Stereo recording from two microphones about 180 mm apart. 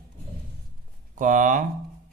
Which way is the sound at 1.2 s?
45° right (ahead or behind).